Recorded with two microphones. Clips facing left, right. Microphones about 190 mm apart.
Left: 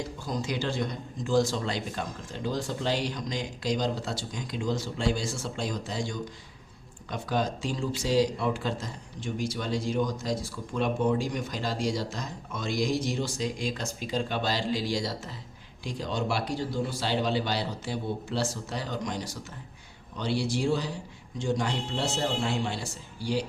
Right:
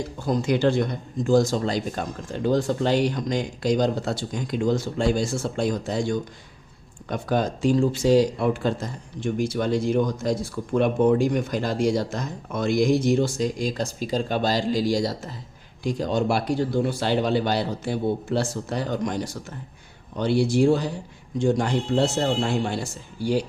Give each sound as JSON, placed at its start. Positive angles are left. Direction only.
{"t": 0.3, "sound": "speech", "side_deg": -55}